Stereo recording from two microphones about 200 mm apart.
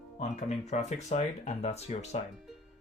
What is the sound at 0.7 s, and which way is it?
Speech, 35° left (ahead or behind).